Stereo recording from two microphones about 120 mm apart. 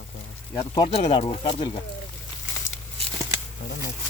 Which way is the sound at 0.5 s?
35° left (ahead or behind).